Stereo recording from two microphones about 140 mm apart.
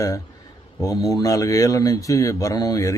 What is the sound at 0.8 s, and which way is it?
Speech, 25° left (ahead or behind).